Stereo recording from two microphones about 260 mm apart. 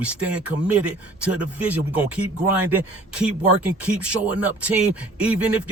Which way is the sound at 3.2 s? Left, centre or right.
Centre.